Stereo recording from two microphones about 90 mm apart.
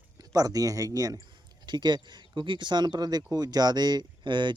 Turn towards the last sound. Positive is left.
turn(degrees=-60)  # may be behind; listen again after turning